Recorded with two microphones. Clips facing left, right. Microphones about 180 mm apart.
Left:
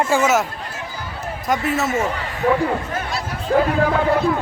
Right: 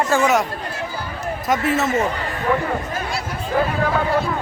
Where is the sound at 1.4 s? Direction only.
Centre (ahead or behind).